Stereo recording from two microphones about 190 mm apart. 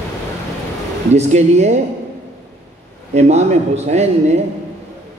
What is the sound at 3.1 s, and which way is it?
A man's voice, 35° right (ahead or behind).